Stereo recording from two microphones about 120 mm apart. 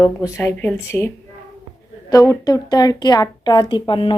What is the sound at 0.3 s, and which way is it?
Speech, 25° left (ahead or behind).